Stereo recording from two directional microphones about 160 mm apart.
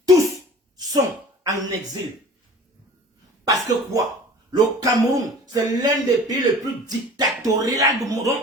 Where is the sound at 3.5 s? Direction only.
20° right (ahead or behind).